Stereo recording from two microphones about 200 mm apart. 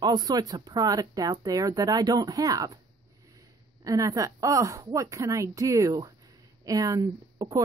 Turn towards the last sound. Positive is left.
turn(degrees=-15)  # may be behind; listen again after turning